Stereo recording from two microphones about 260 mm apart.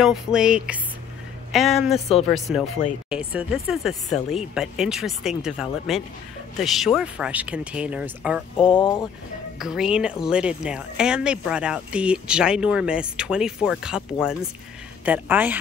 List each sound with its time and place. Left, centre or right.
0.0 s speech: centre
1.9 s a woman's voice: left
2.3 s speech: centre
8.6 s a woman's voice: centre
9.6 s a woman's voice: centre